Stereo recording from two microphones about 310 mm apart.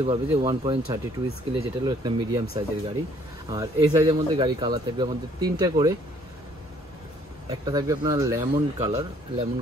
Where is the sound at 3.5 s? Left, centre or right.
Centre.